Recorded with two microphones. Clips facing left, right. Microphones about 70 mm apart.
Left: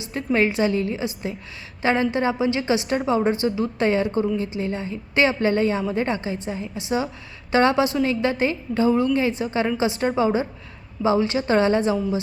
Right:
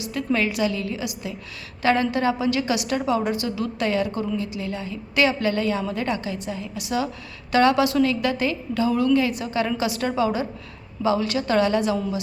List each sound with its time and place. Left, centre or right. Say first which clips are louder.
0.0 s music: right 1 dB; left
0.3 s a woman's voice: left 5 dB; left